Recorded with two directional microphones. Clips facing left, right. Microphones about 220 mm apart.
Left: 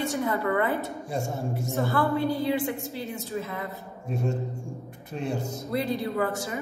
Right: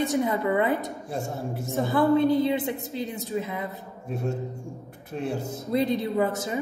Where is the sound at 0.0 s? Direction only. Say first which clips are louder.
Right 3 dB; 20° right (ahead or behind).